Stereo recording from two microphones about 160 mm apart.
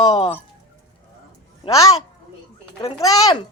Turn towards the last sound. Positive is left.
turn(degrees=25)  # may be behind; listen again after turning